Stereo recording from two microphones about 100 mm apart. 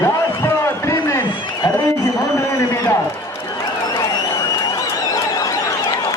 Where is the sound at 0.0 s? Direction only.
30° left (ahead or behind).